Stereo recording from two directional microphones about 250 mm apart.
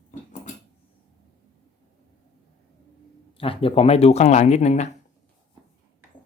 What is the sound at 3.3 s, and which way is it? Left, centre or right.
Speech, left.